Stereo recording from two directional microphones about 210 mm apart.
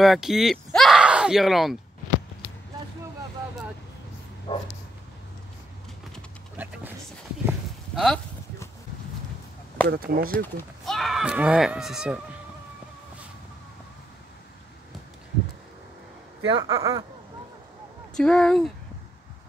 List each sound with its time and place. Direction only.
0.0 s speech: centre (ahead or behind)
4.5 s dog: 30° left (ahead or behind)
6.5 s a sound: 10° right (ahead or behind)
9.8 s speech: 45° right (ahead or behind)
10.3 s speech: 5° left (ahead or behind)
16.5 s speech: 15° right (ahead or behind)
18.1 s speech: 5° left (ahead or behind)